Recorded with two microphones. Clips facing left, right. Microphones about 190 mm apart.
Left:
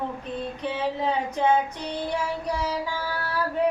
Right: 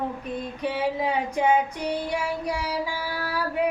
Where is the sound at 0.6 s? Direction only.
10° right (ahead or behind).